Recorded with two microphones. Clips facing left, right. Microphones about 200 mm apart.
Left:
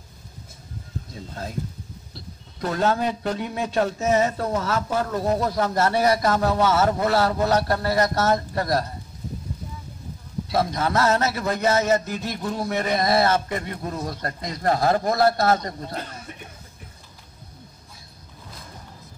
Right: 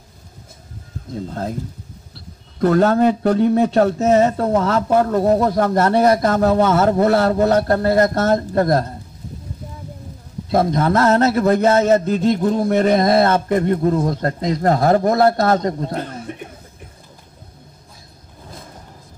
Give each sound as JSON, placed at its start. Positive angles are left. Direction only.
{"t": 1.1, "sound": "a man's voice", "side_deg": -55}
{"t": 2.6, "sound": "a man's voice", "side_deg": -55}
{"t": 10.5, "sound": "a man's voice", "side_deg": -50}